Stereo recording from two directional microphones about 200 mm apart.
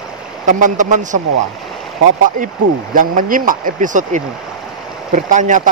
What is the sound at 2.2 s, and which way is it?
Speech, 40° right (ahead or behind).